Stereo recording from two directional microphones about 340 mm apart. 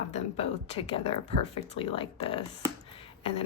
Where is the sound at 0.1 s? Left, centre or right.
Centre.